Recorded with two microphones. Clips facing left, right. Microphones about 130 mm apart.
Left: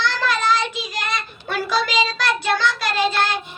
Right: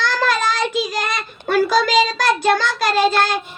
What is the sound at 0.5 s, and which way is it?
A child's voice, 50° right (ahead or behind).